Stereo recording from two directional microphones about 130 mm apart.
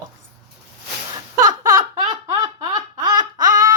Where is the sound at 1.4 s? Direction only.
30° right (ahead or behind).